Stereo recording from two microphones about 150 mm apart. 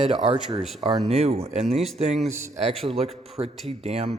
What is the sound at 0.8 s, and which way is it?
Speech, 45° right (ahead or behind).